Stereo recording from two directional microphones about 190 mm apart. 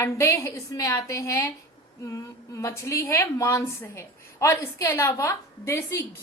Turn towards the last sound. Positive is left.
turn(degrees=15)  # may be behind; listen again after turning